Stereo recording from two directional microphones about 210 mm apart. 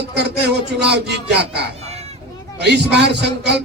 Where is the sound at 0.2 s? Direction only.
55° right (ahead or behind).